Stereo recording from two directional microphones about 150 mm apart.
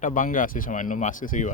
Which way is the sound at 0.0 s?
65° left (ahead or behind).